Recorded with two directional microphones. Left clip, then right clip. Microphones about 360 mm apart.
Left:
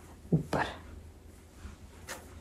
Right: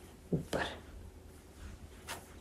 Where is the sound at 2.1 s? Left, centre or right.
Centre.